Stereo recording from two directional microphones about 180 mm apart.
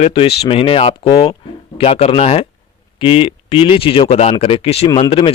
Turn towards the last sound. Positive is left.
turn(degrees=30)  # may be behind; listen again after turning